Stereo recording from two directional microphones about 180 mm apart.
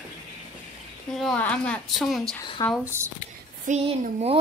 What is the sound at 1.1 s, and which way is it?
A woman's voice, 5° left (ahead or behind).